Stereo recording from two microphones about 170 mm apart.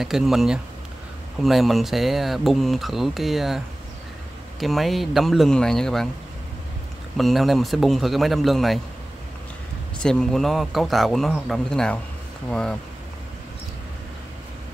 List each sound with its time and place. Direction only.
0.0 s speech: centre (ahead or behind)
7.2 s speech: centre (ahead or behind)
10.0 s speech: 5° left (ahead or behind)